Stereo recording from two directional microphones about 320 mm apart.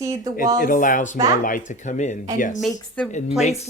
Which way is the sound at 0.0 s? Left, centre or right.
Centre.